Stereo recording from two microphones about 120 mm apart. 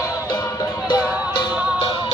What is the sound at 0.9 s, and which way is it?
Music, 40° left (ahead or behind).